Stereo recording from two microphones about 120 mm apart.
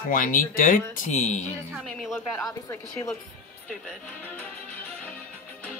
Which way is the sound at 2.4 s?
25° left (ahead or behind).